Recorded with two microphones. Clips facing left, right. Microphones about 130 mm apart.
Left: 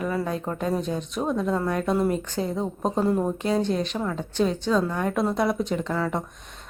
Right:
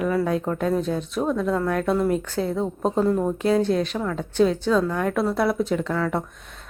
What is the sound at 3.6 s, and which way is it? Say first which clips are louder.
A woman's voice: right 3 dB; centre (ahead or behind).